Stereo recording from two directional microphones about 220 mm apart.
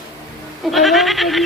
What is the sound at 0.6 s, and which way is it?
Speech, centre (ahead or behind).